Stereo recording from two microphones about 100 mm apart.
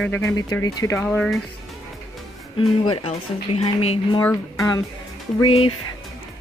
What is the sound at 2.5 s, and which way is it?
Speech, 60° left (ahead or behind).